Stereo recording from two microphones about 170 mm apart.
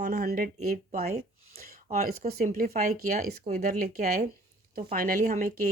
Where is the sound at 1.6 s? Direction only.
60° right (ahead or behind).